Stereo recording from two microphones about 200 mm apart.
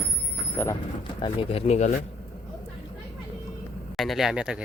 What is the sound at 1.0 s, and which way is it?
Speech, 25° left (ahead or behind).